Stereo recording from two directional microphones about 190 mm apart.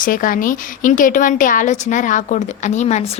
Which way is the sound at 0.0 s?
45° left (ahead or behind).